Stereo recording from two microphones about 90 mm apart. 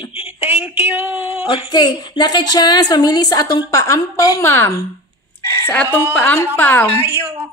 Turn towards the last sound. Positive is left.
turn(degrees=30)  # may be behind; listen again after turning